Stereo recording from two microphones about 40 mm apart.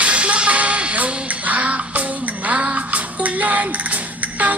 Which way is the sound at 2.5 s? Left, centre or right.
Right.